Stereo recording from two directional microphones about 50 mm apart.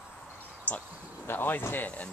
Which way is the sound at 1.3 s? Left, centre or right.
Left.